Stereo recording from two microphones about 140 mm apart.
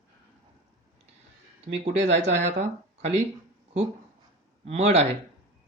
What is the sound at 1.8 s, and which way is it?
Speech, 50° right (ahead or behind).